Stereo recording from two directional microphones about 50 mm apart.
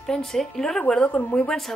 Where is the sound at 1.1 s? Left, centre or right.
Left.